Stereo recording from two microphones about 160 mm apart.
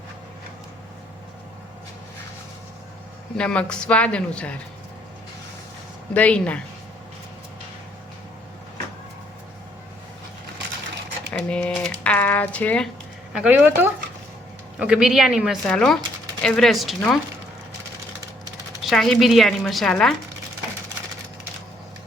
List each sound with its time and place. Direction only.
3.3 s speech: 5° left (ahead or behind)
6.1 s speech: 10° left (ahead or behind)
11.3 s speech: 5° left (ahead or behind)
13.3 s a woman's voice: 10° right (ahead or behind)
18.8 s a woman's voice: centre (ahead or behind)